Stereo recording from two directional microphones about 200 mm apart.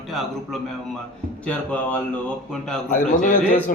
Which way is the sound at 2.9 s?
40° left (ahead or behind).